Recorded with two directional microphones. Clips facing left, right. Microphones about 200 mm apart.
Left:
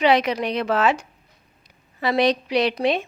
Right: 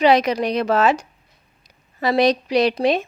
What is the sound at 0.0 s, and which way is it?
A woman's voice, 40° right (ahead or behind).